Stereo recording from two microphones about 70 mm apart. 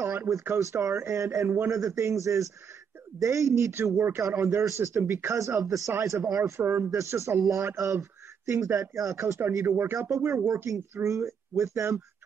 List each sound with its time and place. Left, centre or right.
0.3 s speech: right
6.6 s speech: right
6.9 s speech: right
9.7 s speech: right
10.0 s speech: right